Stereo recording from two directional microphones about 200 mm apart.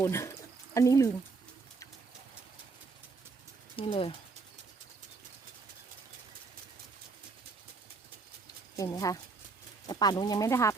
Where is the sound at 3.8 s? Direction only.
25° left (ahead or behind).